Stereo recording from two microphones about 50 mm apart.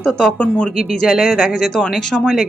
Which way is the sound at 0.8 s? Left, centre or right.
Centre.